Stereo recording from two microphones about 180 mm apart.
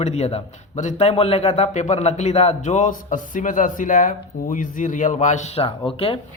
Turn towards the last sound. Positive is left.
turn(degrees=30)  # may be behind; listen again after turning